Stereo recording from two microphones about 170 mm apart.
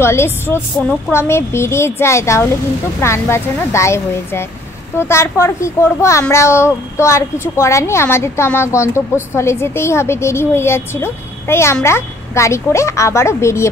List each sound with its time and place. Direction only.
0.0 s a child's voice: 15° left (ahead or behind)
0.7 s a woman's voice: 5° left (ahead or behind)
1.1 s a child's voice: 15° left (ahead or behind)